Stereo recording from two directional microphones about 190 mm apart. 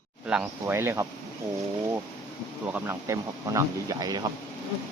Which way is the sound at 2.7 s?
15° right (ahead or behind).